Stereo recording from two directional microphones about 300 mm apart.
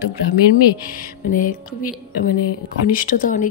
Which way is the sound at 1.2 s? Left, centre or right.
Left.